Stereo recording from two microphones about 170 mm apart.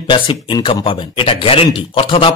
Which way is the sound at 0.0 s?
30° left (ahead or behind).